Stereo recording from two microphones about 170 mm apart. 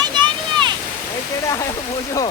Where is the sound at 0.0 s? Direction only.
25° right (ahead or behind).